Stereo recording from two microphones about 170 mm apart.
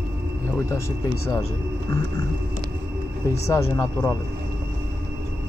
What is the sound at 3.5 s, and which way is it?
Speech, 15° left (ahead or behind).